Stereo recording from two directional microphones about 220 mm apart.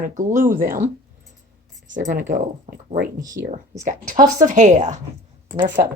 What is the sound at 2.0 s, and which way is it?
Speech, 35° right (ahead or behind).